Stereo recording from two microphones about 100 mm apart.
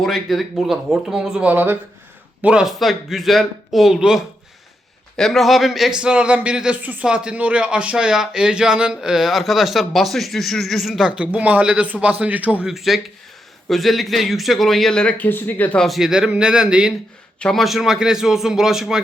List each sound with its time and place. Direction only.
0.0 s speech: centre (ahead or behind)
1.4 s speech: 15° right (ahead or behind)
2.4 s a man's voice: 10° right (ahead or behind)
12.6 s speech: centre (ahead or behind); by 15.8 s 15° left (ahead or behind)
15.8 s a man's voice: centre (ahead or behind)